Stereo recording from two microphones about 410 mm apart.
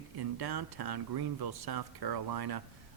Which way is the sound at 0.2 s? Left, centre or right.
Right.